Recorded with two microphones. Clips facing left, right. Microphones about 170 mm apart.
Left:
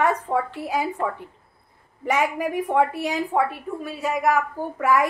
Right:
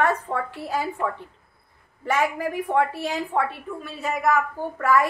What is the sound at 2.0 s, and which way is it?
A woman's voice, 15° left (ahead or behind).